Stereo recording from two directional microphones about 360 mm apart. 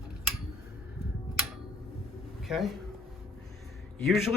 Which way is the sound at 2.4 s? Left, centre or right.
Centre.